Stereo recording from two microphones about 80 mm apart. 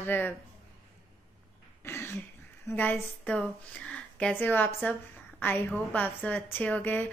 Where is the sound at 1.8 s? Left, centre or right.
Left.